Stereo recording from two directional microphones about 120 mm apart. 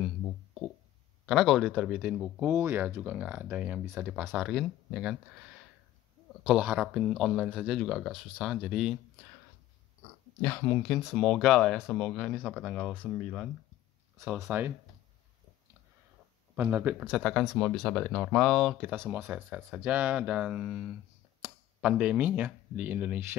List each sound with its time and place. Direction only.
1.2 s speech: centre (ahead or behind)
2.5 s speech: 20° right (ahead or behind)
4.3 s speech: centre (ahead or behind)
6.4 s speech: 5° right (ahead or behind)
10.4 s speech: 20° left (ahead or behind)
10.8 s speech: centre (ahead or behind)
14.5 s speech: 10° right (ahead or behind)
16.5 s speech: 15° right (ahead or behind)
17.2 s speech: 5° left (ahead or behind)
18.9 s speech: 20° right (ahead or behind)
19.2 s speech: 5° right (ahead or behind)